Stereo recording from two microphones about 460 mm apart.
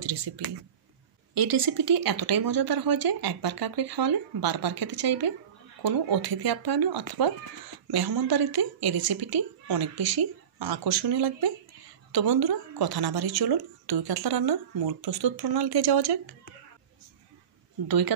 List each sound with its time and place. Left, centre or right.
0.0 s a sound: right
1.3 s speech: right
17.8 s speech: right